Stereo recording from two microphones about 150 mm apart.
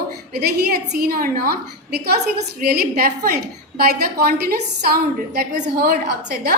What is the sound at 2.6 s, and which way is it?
A woman's voice, 90° right.